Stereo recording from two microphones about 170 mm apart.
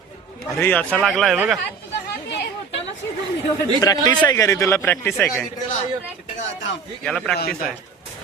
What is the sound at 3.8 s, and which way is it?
A man's voice, 20° left (ahead or behind).